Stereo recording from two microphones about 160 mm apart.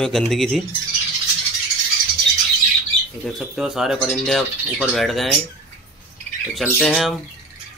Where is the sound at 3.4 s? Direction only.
5° right (ahead or behind).